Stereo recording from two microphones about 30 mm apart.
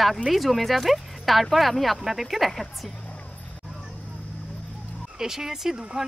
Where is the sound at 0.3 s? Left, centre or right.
Centre.